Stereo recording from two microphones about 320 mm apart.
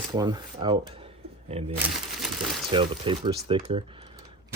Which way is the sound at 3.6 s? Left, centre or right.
Centre.